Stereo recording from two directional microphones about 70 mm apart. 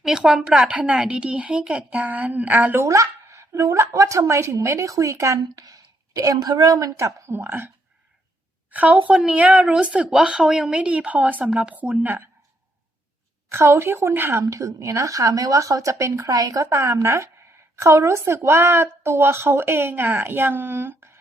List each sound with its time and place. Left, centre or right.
0.0 s a woman's voice: centre
2.8 s speech: right
5.4 s a woman's voice: right
6.9 s speech: right
7.4 s a woman's voice: right
8.7 s a woman's voice: right
13.5 s a woman's voice: right
14.4 s speech: right
16.2 s speech: right
16.6 s a woman's voice: right